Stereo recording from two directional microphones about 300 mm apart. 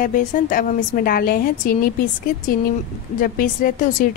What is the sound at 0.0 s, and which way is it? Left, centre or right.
A woman's voice, left.